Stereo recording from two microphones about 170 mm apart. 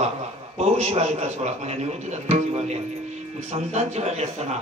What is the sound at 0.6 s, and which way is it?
A man's voice, 40° right (ahead or behind).